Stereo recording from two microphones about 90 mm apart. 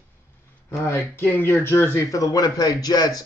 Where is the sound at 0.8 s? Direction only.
30° left (ahead or behind).